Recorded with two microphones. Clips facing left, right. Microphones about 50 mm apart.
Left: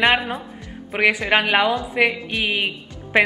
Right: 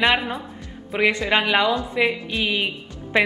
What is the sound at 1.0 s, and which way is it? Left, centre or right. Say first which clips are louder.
Speech: left 2 dB; left.